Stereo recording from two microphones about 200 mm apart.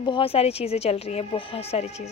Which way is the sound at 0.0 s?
25° left (ahead or behind).